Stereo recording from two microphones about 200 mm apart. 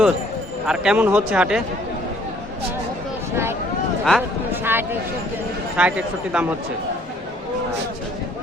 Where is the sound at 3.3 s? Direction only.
10° right (ahead or behind).